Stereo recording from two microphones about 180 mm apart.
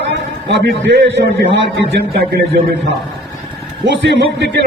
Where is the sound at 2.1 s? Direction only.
60° right (ahead or behind).